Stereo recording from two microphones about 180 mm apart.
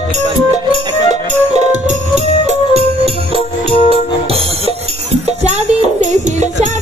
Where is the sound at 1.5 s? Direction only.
40° right (ahead or behind).